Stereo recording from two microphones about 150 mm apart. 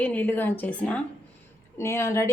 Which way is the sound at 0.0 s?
10° left (ahead or behind).